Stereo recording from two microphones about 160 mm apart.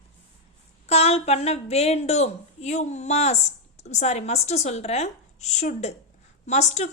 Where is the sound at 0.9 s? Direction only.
40° left (ahead or behind).